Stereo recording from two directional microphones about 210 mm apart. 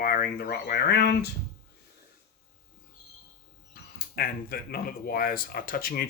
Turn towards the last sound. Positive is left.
turn(degrees=45)  # may be behind; listen again after turning